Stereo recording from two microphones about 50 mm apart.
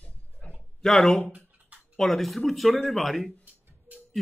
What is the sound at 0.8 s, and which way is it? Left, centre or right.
Speech, centre.